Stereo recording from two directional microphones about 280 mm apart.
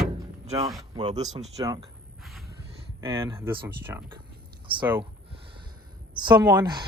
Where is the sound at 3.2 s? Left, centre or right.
Centre.